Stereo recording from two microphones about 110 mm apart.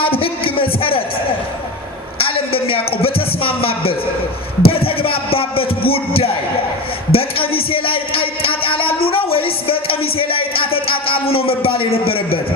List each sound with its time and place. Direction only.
0.0 s music: 55° left (ahead or behind)
2.1 s music: 55° left (ahead or behind)
4.6 s a sound: 55° left (ahead or behind)
7.1 s music: 60° left (ahead or behind)